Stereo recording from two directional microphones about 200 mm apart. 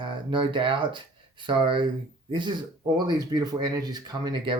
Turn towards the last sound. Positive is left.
turn(degrees=-25)  # may be behind; listen again after turning